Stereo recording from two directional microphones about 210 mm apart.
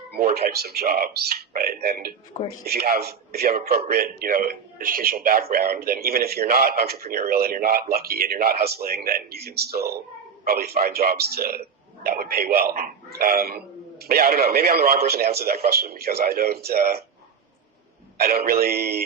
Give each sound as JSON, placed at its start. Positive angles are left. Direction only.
{"t": 0.1, "sound": "a man's voice", "side_deg": -50}
{"t": 18.2, "sound": "a man's voice", "side_deg": -45}